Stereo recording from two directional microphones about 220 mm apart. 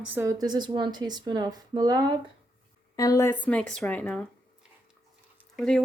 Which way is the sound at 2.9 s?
15° left (ahead or behind).